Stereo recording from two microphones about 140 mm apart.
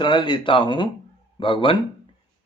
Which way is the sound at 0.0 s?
35° left (ahead or behind).